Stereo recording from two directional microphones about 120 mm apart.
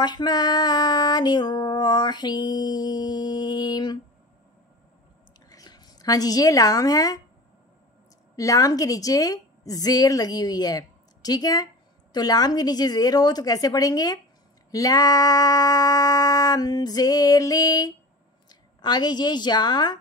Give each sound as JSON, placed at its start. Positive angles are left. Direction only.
{"t": 0.0, "sound": "a woman's voice", "side_deg": 35}
{"t": 5.5, "sound": "a woman's voice", "side_deg": 35}
{"t": 8.4, "sound": "a woman's voice", "side_deg": 30}